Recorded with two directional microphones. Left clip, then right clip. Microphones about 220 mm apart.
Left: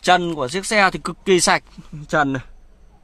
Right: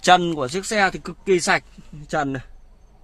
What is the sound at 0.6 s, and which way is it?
Speech, 20° left (ahead or behind).